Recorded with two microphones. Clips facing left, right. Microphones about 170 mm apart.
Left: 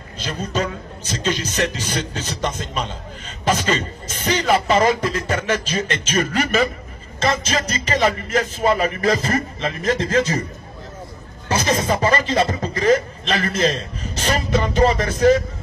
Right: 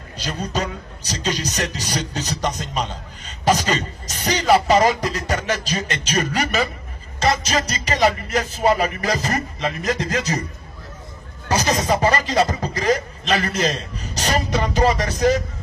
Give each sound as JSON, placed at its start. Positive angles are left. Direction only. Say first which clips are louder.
{"t": 0.2, "sound": "a man's voice", "louder": "left 1 dB", "side_deg": -40}
{"t": 11.4, "sound": "a man's voice", "louder": "even", "side_deg": -35}